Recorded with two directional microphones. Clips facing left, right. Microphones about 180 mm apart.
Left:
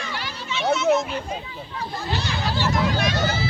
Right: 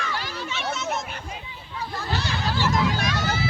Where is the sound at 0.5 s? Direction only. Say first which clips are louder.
Left 10 dB; 45° right (ahead or behind).